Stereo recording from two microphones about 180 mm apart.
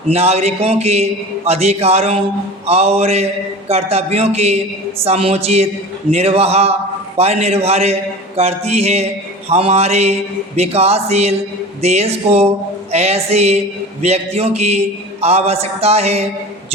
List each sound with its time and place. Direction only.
0.1 s a man's voice: 35° right (ahead or behind)